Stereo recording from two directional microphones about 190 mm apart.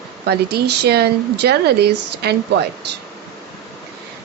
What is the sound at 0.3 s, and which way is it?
A woman's voice, 60° right (ahead or behind).